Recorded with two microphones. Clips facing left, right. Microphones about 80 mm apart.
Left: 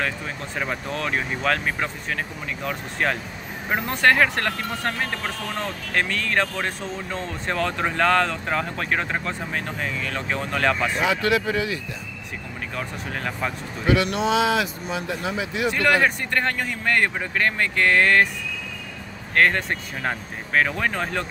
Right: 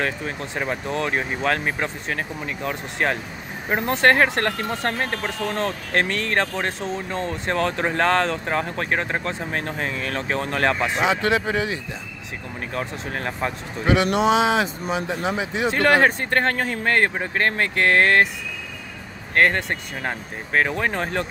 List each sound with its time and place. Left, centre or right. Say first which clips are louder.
0.6 s speech: right 2 dB; right
7.2 s speech: right 3 dB; right
9.2 s speech: right 2 dB; right
14.0 s speech: right 3 dB; right
19.3 s speech: right 1 dB; right